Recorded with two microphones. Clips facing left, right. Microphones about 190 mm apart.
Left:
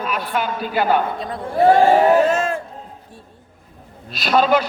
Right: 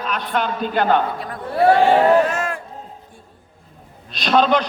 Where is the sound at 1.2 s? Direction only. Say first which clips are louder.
Left 1 dB; 20° left (ahead or behind).